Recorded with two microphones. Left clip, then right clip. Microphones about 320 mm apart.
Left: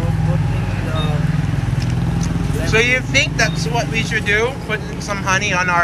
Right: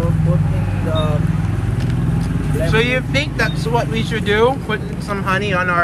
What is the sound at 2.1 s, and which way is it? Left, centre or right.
Speech, centre.